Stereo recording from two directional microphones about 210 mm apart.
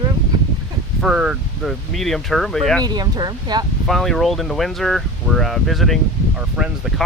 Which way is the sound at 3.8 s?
Centre (ahead or behind).